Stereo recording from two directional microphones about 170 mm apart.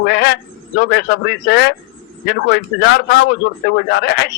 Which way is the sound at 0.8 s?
75° left (ahead or behind).